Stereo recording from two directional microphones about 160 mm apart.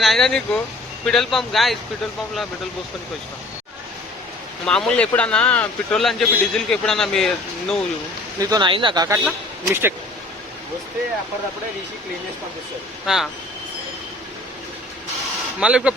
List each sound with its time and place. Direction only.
0.0 s speech: centre (ahead or behind)
4.6 s speech: 5° left (ahead or behind)
8.4 s speech: 25° right (ahead or behind)
9.0 s a man's voice: 15° right (ahead or behind)
13.1 s speech: 5° right (ahead or behind)
15.6 s a man's voice: 5° right (ahead or behind)